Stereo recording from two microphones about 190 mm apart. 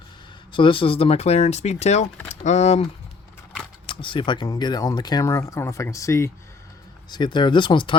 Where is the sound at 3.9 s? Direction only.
25° left (ahead or behind).